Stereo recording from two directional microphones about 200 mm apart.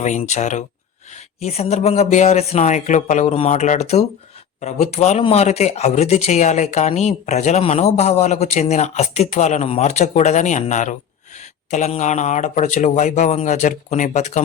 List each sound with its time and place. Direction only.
0.0 s speech: 35° left (ahead or behind)